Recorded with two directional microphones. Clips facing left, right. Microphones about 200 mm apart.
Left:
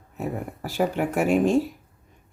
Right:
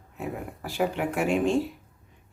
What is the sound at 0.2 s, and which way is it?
Speech, 40° left (ahead or behind).